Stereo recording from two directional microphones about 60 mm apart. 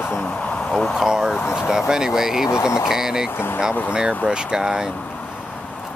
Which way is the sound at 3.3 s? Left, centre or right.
Left.